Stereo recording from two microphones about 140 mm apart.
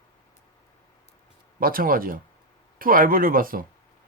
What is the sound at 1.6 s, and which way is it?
Speech, 90° right.